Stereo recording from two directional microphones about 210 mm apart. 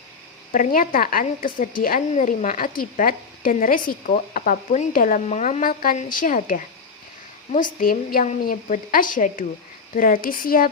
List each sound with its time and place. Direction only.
0.5 s a woman's voice: 40° left (ahead or behind)
7.8 s a woman's voice: 45° left (ahead or behind)